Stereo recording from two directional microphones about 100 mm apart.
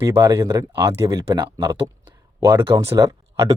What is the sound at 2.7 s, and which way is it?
Speech, 35° right (ahead or behind).